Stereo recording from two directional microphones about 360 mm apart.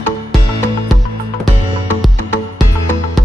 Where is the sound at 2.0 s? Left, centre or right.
Centre.